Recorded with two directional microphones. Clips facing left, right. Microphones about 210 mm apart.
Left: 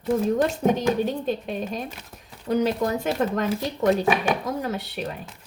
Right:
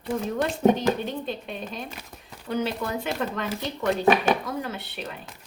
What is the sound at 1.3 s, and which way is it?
Speech, 45° left (ahead or behind).